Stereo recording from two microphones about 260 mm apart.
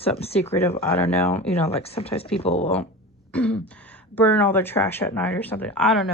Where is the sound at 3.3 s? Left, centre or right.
Centre.